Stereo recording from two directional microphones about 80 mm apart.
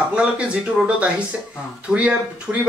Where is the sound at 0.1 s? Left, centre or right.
Centre.